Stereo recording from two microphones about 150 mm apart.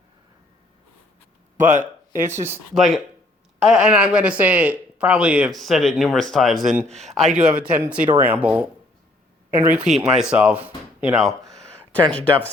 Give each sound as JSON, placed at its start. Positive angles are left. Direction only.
{"t": 1.5, "sound": "speech", "side_deg": -55}
{"t": 2.2, "sound": "speech", "side_deg": -15}
{"t": 2.7, "sound": "speech", "side_deg": 0}
{"t": 11.0, "sound": "a sound", "side_deg": -5}
{"t": 12.1, "sound": "speech", "side_deg": 10}